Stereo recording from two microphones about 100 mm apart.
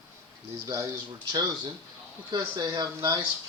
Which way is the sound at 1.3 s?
45° right (ahead or behind).